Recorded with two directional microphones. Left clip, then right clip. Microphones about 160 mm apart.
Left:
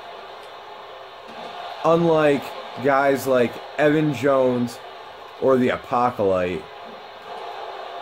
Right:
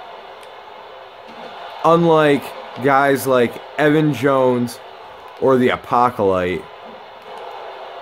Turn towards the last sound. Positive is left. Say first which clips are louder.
# right 4 dB
turn(degrees=-50)  # may be behind; listen again after turning